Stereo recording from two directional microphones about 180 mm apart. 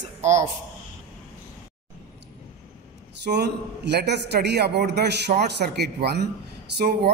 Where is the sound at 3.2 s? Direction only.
70° right (ahead or behind).